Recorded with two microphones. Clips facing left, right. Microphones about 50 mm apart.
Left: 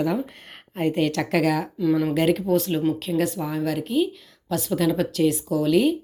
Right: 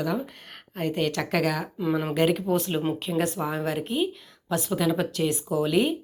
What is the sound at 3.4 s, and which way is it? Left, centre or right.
Speech, right.